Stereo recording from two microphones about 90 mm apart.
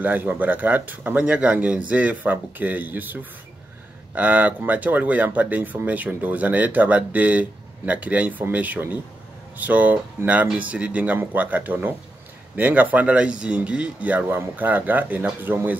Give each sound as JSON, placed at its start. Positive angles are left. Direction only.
{"t": 0.0, "sound": "speech", "side_deg": -20}